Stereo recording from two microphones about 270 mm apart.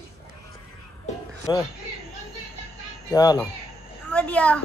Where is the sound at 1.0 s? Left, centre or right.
Centre.